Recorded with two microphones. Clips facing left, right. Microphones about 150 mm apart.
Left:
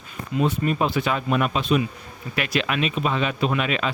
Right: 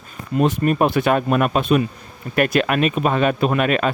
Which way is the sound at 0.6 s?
55° right (ahead or behind).